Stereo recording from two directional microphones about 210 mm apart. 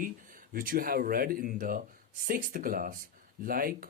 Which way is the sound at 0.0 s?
40° right (ahead or behind).